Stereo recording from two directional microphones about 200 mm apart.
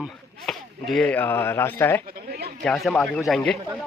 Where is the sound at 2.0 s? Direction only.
50° right (ahead or behind).